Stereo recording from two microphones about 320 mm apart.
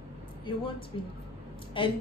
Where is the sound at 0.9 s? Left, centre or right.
Centre.